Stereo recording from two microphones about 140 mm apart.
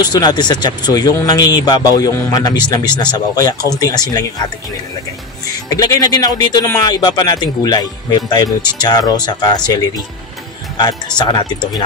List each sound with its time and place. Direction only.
0.0 s speech: 30° left (ahead or behind)
5.7 s speech: 25° left (ahead or behind)
11.1 s speech: 30° left (ahead or behind)